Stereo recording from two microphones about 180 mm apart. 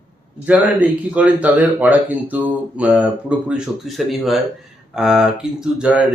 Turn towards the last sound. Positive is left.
turn(degrees=-5)  # may be behind; listen again after turning